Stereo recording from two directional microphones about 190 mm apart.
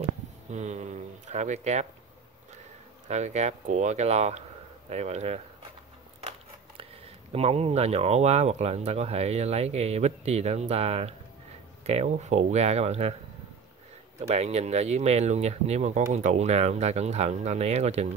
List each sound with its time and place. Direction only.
0.5 s speech: 35° right (ahead or behind)
3.1 s speech: 35° right (ahead or behind)
7.3 s speech: 30° right (ahead or behind)
14.2 s speech: 35° right (ahead or behind)